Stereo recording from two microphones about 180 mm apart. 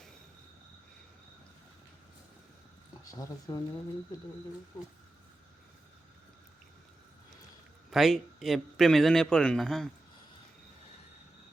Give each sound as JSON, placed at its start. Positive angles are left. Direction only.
{"t": 3.0, "sound": "speech", "side_deg": 20}
{"t": 7.9, "sound": "speech", "side_deg": 0}